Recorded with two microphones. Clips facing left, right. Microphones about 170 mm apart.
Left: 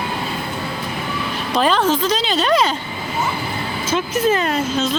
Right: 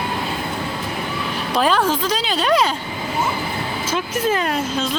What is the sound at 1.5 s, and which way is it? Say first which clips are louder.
Speech: left 1 dB; 10° right (ahead or behind).